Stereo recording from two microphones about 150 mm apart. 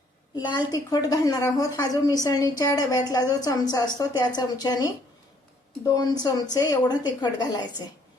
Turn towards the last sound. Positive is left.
turn(degrees=30)  # may be behind; listen again after turning